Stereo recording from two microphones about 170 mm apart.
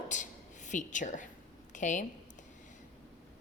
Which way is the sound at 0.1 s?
45° left (ahead or behind).